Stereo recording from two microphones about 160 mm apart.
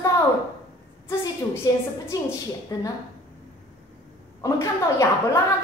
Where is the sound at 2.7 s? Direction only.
20° left (ahead or behind).